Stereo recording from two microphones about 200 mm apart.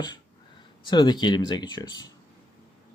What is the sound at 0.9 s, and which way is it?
Speech, 20° left (ahead or behind).